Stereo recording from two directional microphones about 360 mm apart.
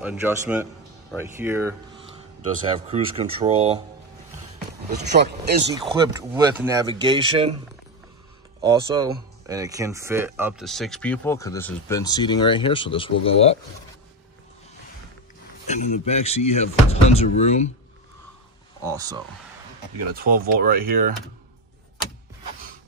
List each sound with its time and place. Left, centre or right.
0.0 s speech: centre
2.9 s speech: centre
4.8 s speech: right
5.8 s speech: centre
8.5 s speech: centre
15.7 s speech: centre
18.9 s speech: centre
20.2 s speech: right